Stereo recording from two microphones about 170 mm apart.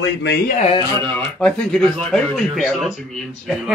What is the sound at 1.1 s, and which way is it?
Speech, 10° left (ahead or behind).